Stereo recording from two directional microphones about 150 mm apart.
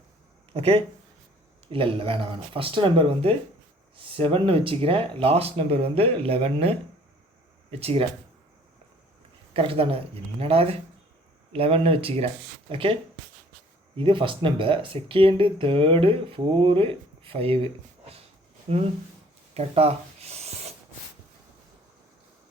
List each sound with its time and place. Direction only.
0.5 s speech: 40° right (ahead or behind)
9.5 s speech: 40° right (ahead or behind)
19.5 s a sound: 45° right (ahead or behind)